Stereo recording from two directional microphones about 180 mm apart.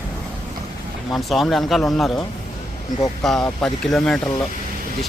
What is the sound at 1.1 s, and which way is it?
Speech, centre (ahead or behind).